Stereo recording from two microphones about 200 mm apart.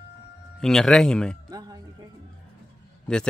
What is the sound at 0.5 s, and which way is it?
Speech, centre (ahead or behind).